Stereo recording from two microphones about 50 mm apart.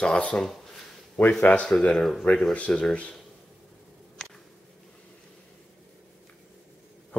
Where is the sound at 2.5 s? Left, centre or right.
Left.